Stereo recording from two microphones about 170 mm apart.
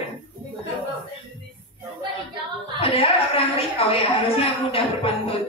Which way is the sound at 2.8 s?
35° left (ahead or behind).